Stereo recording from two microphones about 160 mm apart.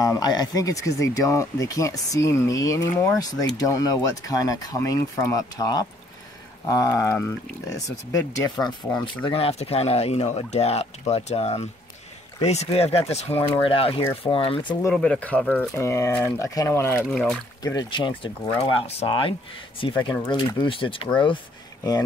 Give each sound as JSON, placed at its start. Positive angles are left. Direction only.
{"t": 0.0, "sound": "speech", "side_deg": 25}
{"t": 14.9, "sound": "speech", "side_deg": 5}
{"t": 17.1, "sound": "speech", "side_deg": 5}
{"t": 17.6, "sound": "speech", "side_deg": 25}